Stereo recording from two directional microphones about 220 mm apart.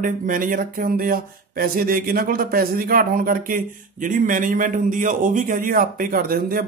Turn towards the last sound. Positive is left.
turn(degrees=-40)  # may be behind; listen again after turning